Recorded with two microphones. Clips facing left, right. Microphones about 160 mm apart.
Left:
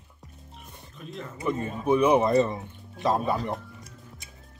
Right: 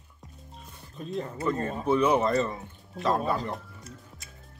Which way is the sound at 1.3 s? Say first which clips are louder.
Left 2 dB; 10° left (ahead or behind).